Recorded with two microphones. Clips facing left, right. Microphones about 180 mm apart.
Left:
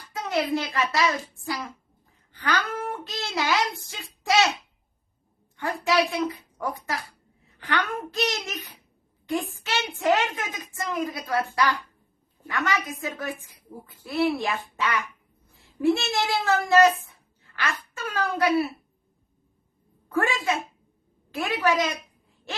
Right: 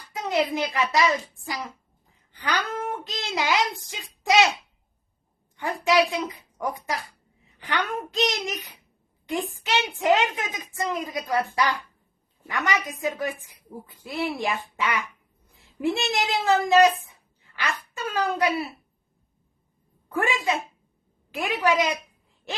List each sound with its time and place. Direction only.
0.1 s speech: 15° right (ahead or behind)
2.4 s a woman's voice: 15° right (ahead or behind)
5.5 s a woman's voice: 15° right (ahead or behind)
20.1 s a woman's voice: 15° right (ahead or behind)